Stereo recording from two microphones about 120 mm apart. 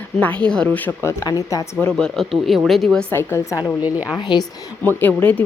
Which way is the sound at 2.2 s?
Centre (ahead or behind).